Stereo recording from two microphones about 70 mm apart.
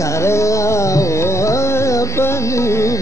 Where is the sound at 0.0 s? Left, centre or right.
Left.